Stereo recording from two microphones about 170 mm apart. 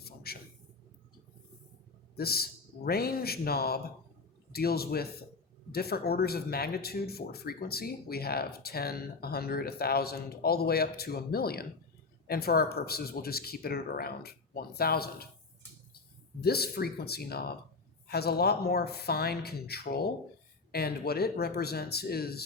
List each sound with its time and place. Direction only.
0.0 s a sound: 65° left (ahead or behind)
2.1 s speech: 65° left (ahead or behind)
16.4 s speech: 65° left (ahead or behind)